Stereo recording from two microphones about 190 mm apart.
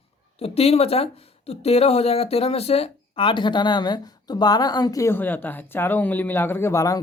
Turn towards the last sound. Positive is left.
turn(degrees=15)  # may be behind; listen again after turning